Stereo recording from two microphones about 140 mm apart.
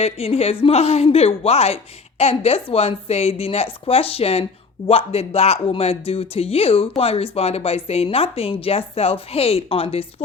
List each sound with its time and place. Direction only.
0.0 s a woman's voice: 45° left (ahead or behind)